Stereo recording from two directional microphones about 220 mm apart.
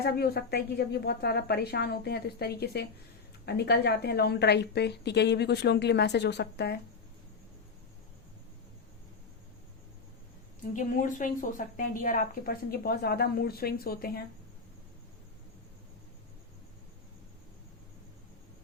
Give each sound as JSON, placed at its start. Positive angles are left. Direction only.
{"t": 0.0, "sound": "a woman's voice", "side_deg": 45}
{"t": 10.8, "sound": "a woman's voice", "side_deg": 35}